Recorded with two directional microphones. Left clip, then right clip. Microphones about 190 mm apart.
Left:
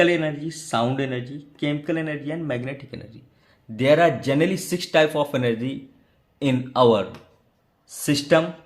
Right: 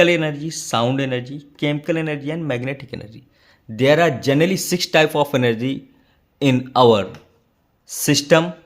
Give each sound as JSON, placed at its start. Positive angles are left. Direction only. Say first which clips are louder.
{"t": 0.0, "sound": "speech", "louder": "right 4 dB", "side_deg": -50}